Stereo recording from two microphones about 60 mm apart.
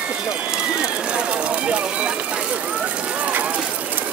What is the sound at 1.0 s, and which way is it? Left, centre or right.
Run, centre.